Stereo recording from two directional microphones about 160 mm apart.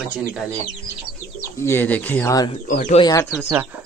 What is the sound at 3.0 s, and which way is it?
Speech, 20° left (ahead or behind).